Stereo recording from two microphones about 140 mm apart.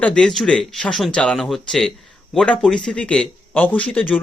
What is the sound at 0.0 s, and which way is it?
A man's voice, 5° left (ahead or behind).